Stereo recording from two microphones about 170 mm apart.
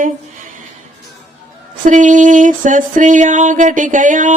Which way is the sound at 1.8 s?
50° right (ahead or behind).